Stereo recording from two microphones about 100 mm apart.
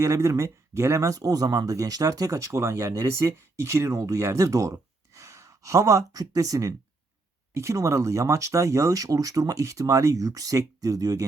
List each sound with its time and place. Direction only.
0.0 s speech: 30° right (ahead or behind)